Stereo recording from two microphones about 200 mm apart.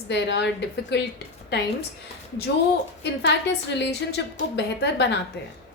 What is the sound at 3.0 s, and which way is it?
A woman's voice, 60° left (ahead or behind).